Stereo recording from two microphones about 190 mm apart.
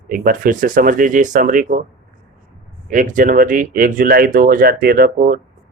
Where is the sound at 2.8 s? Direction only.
45° right (ahead or behind).